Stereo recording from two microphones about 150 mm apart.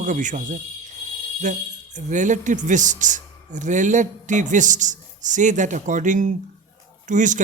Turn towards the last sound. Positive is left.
turn(degrees=-55)  # may be behind; listen again after turning